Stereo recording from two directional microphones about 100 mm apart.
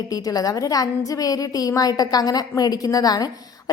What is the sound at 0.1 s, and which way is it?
A woman's voice, 40° left (ahead or behind).